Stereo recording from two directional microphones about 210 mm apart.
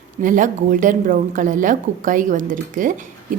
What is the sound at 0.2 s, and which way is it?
A woman's voice, 40° right (ahead or behind).